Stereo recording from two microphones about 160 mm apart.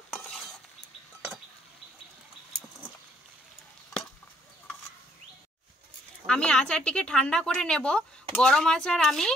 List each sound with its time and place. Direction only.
6.2 s a woman's voice: 5° left (ahead or behind)